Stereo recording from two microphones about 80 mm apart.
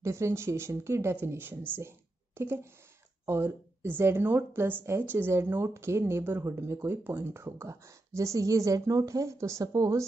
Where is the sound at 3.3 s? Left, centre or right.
Right.